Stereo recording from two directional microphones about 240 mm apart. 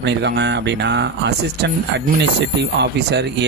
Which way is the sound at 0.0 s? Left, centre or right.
Right.